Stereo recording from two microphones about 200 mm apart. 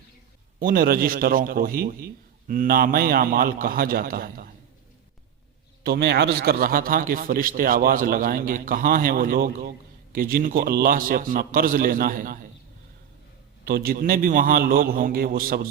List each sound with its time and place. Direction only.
0.6 s a man's voice: 45° right (ahead or behind)
5.8 s a man's voice: 55° right (ahead or behind)
13.7 s a man's voice: 50° right (ahead or behind)